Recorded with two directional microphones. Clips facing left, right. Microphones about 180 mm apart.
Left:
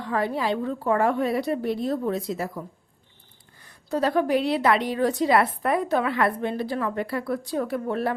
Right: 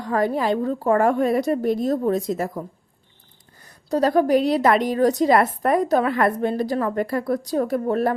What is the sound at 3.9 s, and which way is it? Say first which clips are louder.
A woman's voice: right 4 dB; 40° right (ahead or behind).